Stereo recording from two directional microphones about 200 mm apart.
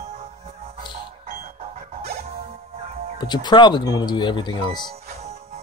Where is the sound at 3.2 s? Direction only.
20° left (ahead or behind).